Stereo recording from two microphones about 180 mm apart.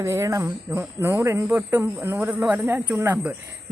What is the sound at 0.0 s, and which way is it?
Speech, 15° right (ahead or behind).